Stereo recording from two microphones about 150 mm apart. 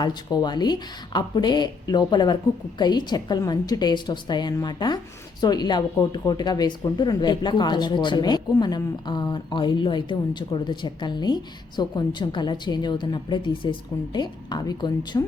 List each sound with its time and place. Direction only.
0.0 s speech: 30° left (ahead or behind)